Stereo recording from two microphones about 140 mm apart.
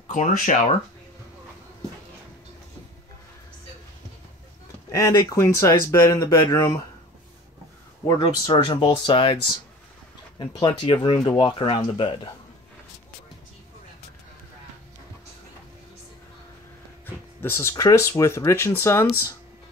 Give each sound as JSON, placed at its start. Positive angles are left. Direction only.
{"t": 0.1, "sound": "speech", "side_deg": 65}
{"t": 4.9, "sound": "speech", "side_deg": 25}
{"t": 8.1, "sound": "speech", "side_deg": 30}
{"t": 10.4, "sound": "speech", "side_deg": 30}
{"t": 17.0, "sound": "speech", "side_deg": 15}